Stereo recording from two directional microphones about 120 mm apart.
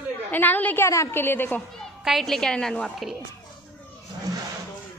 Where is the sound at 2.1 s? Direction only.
Centre (ahead or behind).